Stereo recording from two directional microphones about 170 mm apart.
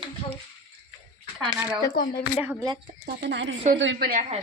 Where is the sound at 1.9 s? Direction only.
60° left (ahead or behind).